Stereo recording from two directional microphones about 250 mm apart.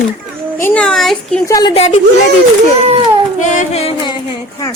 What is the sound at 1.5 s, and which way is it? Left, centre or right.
Music, centre.